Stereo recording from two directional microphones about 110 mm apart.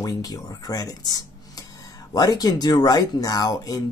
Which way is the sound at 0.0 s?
35° left (ahead or behind).